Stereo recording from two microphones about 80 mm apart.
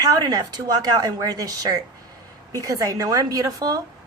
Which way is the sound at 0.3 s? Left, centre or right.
Right.